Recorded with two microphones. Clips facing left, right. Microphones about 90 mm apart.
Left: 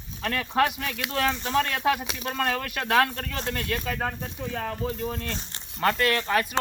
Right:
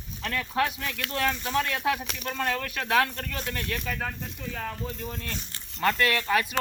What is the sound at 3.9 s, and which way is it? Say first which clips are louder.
Speech: left 3 dB; 25° left (ahead or behind).